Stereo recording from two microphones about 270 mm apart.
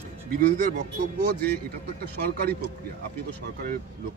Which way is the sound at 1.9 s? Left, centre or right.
Right.